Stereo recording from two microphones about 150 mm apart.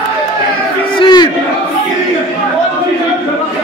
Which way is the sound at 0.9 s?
30° left (ahead or behind).